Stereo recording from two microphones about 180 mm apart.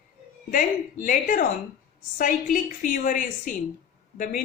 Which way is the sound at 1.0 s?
50° left (ahead or behind).